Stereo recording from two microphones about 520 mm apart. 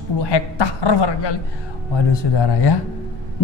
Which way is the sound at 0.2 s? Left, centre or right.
Left.